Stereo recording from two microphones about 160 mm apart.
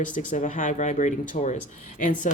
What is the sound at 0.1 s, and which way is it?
Speech, 55° left (ahead or behind).